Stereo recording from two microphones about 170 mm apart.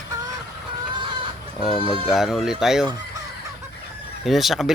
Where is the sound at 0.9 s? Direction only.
30° right (ahead or behind).